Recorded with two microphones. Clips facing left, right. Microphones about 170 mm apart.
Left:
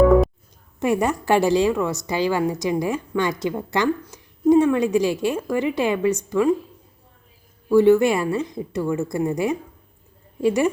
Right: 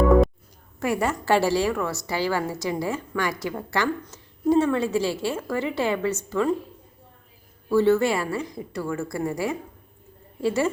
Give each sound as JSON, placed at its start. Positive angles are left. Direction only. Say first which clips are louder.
{"t": 0.8, "sound": "a woman's voice", "louder": "left 4 dB", "side_deg": 20}
{"t": 7.7, "sound": "a woman's voice", "louder": "left 5 dB", "side_deg": 15}